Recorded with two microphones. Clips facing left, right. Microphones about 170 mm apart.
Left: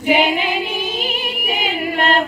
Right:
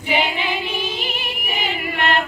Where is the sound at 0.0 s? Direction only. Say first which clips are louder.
Left 6 dB; 50° left (ahead or behind).